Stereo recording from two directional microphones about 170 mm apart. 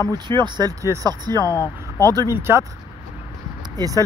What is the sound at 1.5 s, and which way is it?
Speech, 15° left (ahead or behind).